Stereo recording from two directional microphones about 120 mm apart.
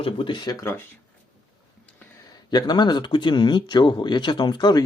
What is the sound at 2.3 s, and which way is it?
Speech, 35° left (ahead or behind).